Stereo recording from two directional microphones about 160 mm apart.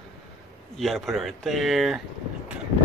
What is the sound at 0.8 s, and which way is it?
Speech, centre (ahead or behind).